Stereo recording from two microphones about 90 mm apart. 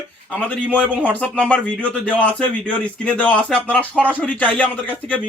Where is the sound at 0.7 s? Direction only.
15° left (ahead or behind).